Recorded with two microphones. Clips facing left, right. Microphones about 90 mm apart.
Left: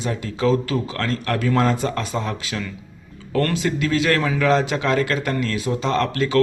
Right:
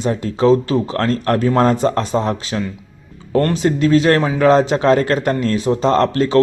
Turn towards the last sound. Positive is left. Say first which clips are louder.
# right 6 dB
turn(degrees=-35)  # may be behind; listen again after turning